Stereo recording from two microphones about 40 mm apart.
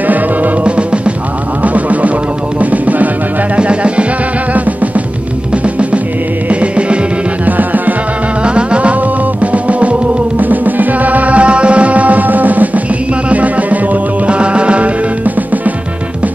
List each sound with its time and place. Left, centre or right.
0.0 s music: right
0.7 s music: right
1.6 s music: right
3.5 s music: right
4.6 s music: right
7.4 s music: right
8.4 s music: right
10.4 s music: right
15.2 s music: right